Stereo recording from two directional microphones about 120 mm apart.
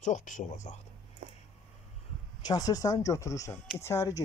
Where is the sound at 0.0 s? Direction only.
85° left.